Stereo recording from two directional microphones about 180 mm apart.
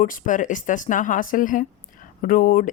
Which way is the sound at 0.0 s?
50° left (ahead or behind).